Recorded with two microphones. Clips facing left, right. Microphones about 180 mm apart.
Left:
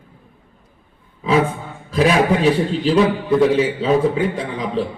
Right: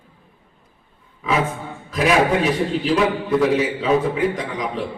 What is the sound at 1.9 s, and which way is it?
A man's voice, 30° left (ahead or behind).